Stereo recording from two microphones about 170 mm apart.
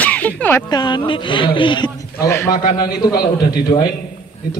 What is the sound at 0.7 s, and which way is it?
A man's voice, 25° left (ahead or behind).